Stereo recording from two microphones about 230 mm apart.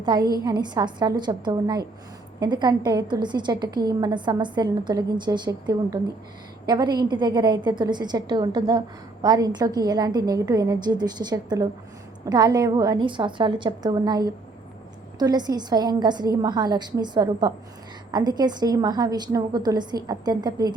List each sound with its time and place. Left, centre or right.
0.0 s a woman's voice: centre